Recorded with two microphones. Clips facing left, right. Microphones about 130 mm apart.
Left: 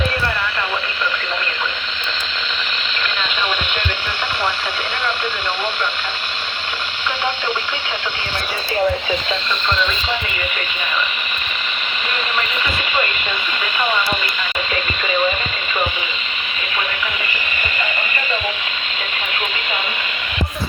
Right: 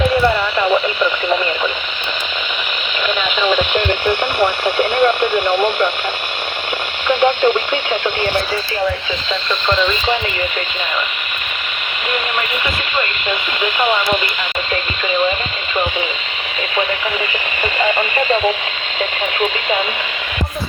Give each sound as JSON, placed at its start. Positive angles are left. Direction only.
{"t": 3.5, "sound": "radio", "side_deg": -45}
{"t": 7.1, "sound": "radio", "side_deg": -50}